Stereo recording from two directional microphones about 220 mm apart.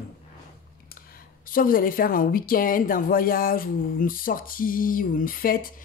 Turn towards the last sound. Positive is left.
turn(degrees=40)  # may be behind; listen again after turning